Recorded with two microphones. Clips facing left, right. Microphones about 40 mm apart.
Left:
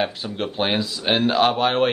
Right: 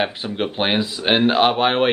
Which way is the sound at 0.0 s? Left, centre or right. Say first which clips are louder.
Right 2 dB; right.